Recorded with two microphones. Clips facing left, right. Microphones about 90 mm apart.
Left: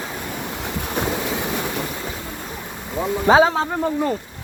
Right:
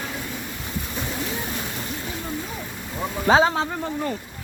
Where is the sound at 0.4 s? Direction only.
70° left (ahead or behind).